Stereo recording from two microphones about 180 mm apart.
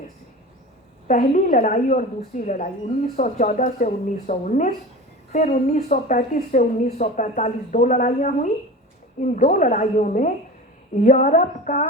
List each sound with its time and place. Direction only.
1.0 s speech: 45° left (ahead or behind)